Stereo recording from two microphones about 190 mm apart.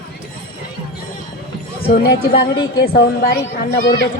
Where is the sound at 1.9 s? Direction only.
55° left (ahead or behind).